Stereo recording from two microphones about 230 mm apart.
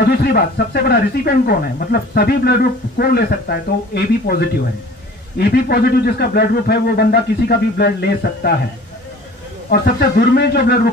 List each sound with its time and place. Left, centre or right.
0.1 s speech: left
9.7 s speech: left